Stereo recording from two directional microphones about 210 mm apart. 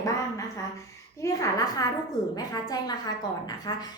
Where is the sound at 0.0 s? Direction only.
15° left (ahead or behind).